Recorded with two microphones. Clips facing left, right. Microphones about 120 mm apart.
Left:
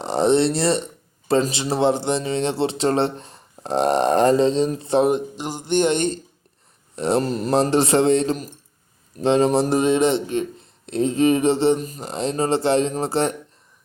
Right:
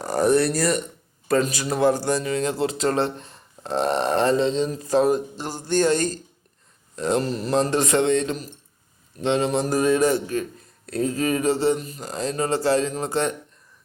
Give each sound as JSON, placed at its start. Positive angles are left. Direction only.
{"t": 0.0, "sound": "a man's voice", "side_deg": 25}